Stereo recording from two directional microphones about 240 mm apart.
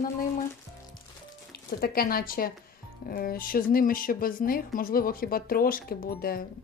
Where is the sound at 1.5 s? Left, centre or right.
Left.